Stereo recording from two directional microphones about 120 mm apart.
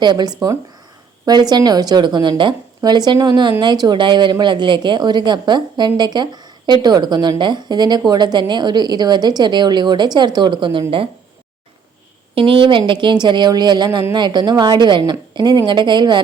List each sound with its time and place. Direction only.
0.0 s a woman's voice: 35° right (ahead or behind)
12.3 s a woman's voice: 50° right (ahead or behind)